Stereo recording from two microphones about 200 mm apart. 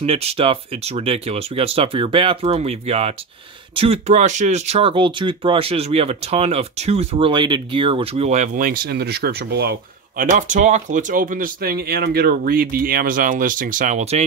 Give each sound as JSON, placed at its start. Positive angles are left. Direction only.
{"t": 0.0, "sound": "speech", "side_deg": -30}
{"t": 10.3, "sound": "speech", "side_deg": -40}